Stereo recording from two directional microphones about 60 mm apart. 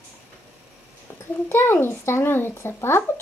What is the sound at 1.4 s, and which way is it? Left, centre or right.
Speech, left.